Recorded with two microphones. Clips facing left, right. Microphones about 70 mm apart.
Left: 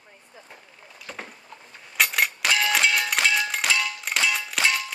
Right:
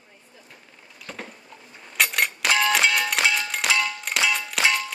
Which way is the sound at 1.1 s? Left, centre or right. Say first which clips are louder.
Right 1 dB; centre.